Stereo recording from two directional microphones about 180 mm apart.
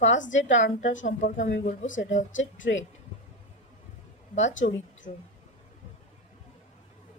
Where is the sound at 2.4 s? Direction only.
90° left.